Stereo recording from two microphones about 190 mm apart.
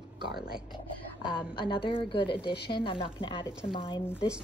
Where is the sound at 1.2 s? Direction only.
25° left (ahead or behind).